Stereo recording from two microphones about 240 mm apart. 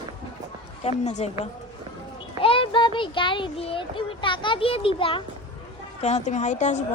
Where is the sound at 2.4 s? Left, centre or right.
Left.